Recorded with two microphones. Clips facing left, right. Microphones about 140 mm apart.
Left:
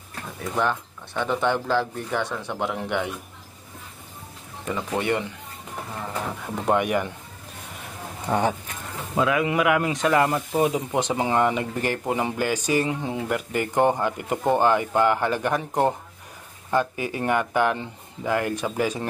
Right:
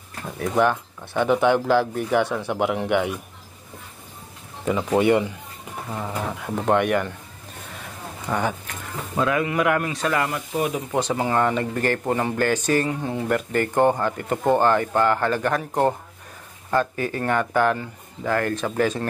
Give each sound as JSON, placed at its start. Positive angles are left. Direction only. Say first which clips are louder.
{"t": 0.4, "sound": "speech", "louder": "right 5 dB", "side_deg": -5}
{"t": 4.6, "sound": "speech", "louder": "right 6 dB", "side_deg": -15}
{"t": 6.7, "sound": "speech", "louder": "right 2 dB", "side_deg": 5}
{"t": 8.3, "sound": "speech", "louder": "left 2 dB", "side_deg": 30}
{"t": 9.1, "sound": "a man's voice", "louder": "even", "side_deg": 5}
{"t": 9.8, "sound": "speech", "louder": "left 3 dB", "side_deg": 20}